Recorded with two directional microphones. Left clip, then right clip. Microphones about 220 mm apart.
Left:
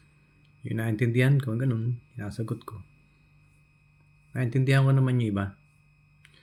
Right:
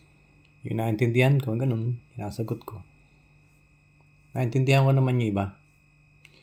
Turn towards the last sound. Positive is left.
turn(degrees=15)  # may be behind; listen again after turning